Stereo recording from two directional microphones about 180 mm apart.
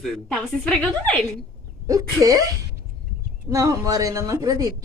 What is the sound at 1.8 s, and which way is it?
A woman's voice, 20° right (ahead or behind).